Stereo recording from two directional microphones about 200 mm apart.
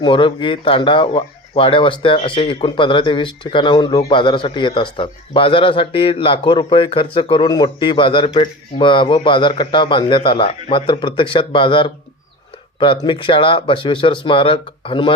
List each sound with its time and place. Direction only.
0.0 s speech: 25° left (ahead or behind)